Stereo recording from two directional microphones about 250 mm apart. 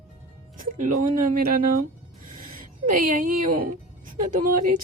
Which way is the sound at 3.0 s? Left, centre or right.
Right.